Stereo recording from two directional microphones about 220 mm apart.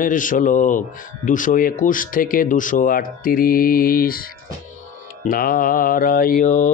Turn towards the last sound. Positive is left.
turn(degrees=35)  # may be behind; listen again after turning